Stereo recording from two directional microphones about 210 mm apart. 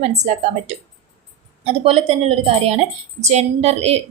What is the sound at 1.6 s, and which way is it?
A woman's voice, 30° right (ahead or behind).